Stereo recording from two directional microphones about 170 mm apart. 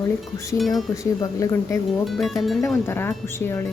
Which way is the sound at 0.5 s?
Centre (ahead or behind).